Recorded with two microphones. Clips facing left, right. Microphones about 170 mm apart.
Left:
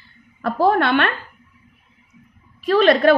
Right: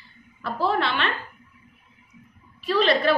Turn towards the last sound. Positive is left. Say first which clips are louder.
# left 7 dB
turn(degrees=55)  # may be behind; listen again after turning